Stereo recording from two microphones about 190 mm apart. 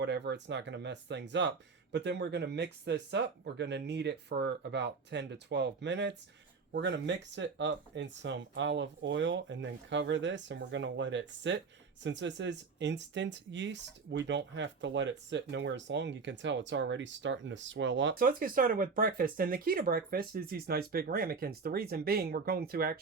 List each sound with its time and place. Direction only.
0.0 s speech: 65° right (ahead or behind)
18.2 s speech: 50° right (ahead or behind)